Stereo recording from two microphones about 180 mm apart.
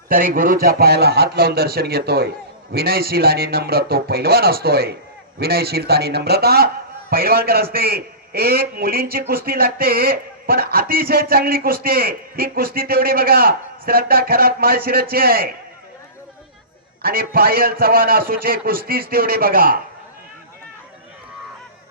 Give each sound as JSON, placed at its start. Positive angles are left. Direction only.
{"t": 0.1, "sound": "a man's voice", "side_deg": -50}
{"t": 17.0, "sound": "a man's voice", "side_deg": -55}